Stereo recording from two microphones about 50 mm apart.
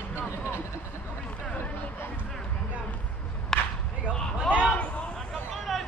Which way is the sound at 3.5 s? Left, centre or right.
Centre.